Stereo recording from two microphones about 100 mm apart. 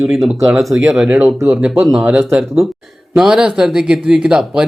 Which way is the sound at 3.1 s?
5° right (ahead or behind).